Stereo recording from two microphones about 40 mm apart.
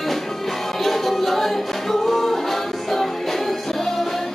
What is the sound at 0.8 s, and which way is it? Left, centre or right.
Music, centre.